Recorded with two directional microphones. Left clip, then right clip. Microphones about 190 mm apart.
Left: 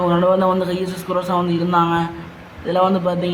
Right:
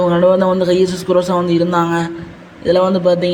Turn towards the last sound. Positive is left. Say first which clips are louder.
# right 4 dB
turn(degrees=-15)  # may be behind; listen again after turning